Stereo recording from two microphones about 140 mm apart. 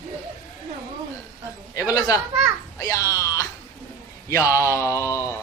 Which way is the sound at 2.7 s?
25° left (ahead or behind).